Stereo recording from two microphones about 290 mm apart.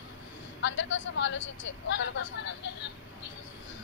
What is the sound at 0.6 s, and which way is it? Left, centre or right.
Speech, left.